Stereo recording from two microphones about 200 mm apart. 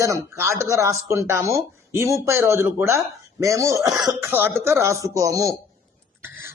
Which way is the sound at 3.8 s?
Centre (ahead or behind).